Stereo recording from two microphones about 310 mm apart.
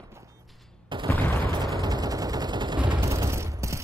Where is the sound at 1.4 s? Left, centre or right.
Centre.